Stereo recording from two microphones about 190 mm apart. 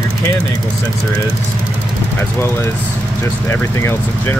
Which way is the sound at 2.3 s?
15° left (ahead or behind).